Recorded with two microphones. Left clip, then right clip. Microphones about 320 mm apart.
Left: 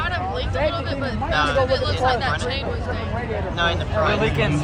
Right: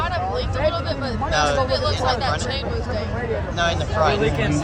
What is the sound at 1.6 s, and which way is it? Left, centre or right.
Speech, centre.